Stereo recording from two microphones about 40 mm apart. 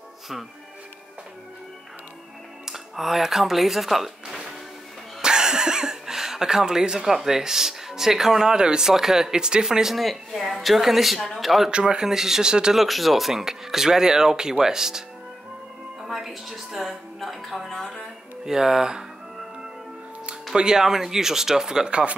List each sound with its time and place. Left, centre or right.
2.6 s speech: centre
9.9 s speech: centre
11.7 s speech: centre
12.7 s speech: centre
16.1 s speech: centre
18.4 s speech: centre
20.5 s speech: centre